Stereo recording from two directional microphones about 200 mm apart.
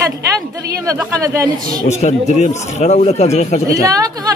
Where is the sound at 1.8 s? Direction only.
35° left (ahead or behind).